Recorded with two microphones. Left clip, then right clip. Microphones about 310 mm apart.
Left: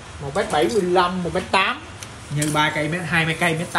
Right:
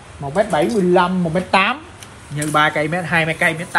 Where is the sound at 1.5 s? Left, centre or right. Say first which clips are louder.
Right 4 dB; centre.